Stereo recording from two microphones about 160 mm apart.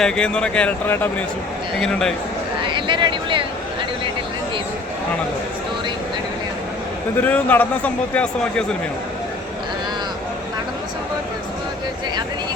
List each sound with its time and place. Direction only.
0.0 s speech: 5° left (ahead or behind)
2.6 s a sound: 30° right (ahead or behind)
7.2 s a man's voice: 10° left (ahead or behind)